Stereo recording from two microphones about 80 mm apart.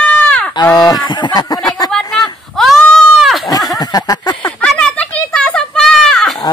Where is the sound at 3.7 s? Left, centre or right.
Left.